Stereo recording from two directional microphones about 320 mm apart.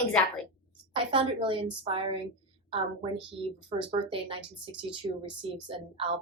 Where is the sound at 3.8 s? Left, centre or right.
Centre.